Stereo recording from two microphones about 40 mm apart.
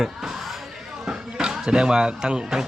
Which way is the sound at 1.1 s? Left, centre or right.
Centre.